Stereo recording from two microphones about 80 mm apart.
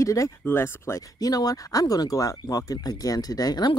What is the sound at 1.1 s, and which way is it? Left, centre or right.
Speech, left.